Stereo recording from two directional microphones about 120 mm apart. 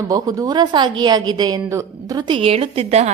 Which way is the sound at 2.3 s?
55° right (ahead or behind).